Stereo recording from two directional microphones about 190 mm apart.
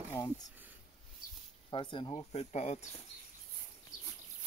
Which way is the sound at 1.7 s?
25° left (ahead or behind).